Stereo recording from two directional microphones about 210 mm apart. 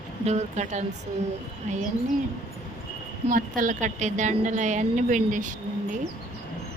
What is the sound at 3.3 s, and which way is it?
Speech, 40° right (ahead or behind).